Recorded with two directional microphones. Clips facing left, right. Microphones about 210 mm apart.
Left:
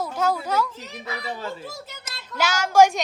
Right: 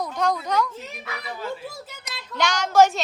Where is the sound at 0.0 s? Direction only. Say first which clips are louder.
Even; 5° left (ahead or behind).